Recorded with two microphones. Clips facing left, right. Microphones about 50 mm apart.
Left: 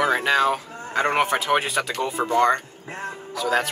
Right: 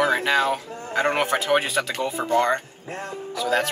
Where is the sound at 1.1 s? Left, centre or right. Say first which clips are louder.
Left 1 dB; centre.